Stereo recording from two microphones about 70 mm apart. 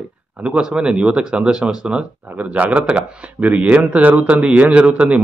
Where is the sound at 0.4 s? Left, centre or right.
Centre.